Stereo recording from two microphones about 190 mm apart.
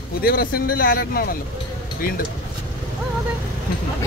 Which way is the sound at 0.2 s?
50° left (ahead or behind).